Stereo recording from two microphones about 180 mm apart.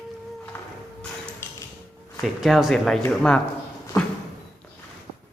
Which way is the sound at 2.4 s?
Centre (ahead or behind).